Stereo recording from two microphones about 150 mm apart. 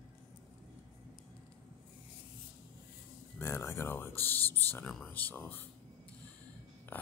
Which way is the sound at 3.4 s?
15° left (ahead or behind).